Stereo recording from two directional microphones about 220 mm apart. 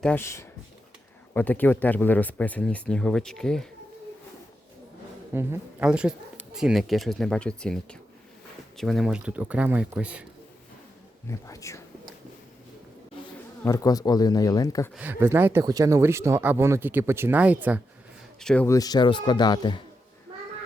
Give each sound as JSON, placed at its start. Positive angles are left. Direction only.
{"t": 0.0, "sound": "speech", "side_deg": 10}
{"t": 5.3, "sound": "speech", "side_deg": -10}
{"t": 11.3, "sound": "speech", "side_deg": 15}
{"t": 13.7, "sound": "speech", "side_deg": 15}
{"t": 14.9, "sound": "speech", "side_deg": -10}
{"t": 18.3, "sound": "a man's voice", "side_deg": 5}